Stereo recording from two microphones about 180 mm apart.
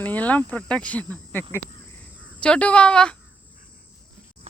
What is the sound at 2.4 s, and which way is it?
Speech, 5° left (ahead or behind).